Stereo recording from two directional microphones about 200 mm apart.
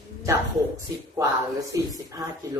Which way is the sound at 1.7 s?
15° right (ahead or behind).